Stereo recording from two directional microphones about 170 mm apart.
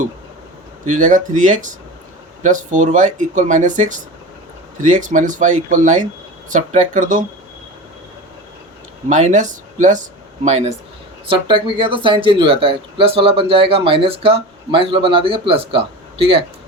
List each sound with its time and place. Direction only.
0.9 s speech: 50° right (ahead or behind)
9.0 s speech: 45° right (ahead or behind)
11.3 s speech: 30° right (ahead or behind)